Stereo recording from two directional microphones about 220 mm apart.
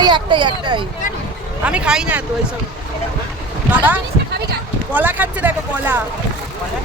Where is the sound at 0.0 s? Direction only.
20° right (ahead or behind).